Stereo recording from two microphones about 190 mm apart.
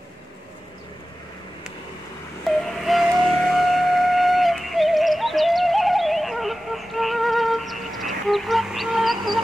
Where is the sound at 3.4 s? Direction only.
Centre (ahead or behind).